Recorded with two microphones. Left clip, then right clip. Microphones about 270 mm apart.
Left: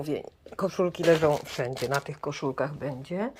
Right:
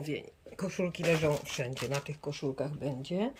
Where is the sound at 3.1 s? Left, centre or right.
Centre.